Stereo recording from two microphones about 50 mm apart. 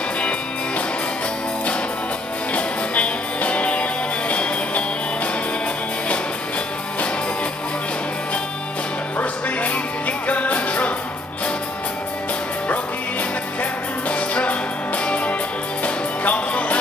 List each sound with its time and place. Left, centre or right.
2.5 s music: left
9.2 s music: left
13.6 s music: left